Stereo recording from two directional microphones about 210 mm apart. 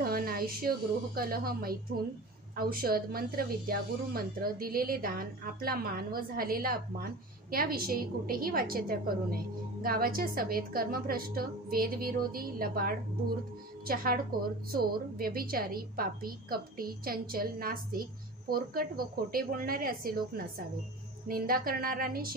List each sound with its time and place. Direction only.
0.0 s a woman's voice: 45° right (ahead or behind)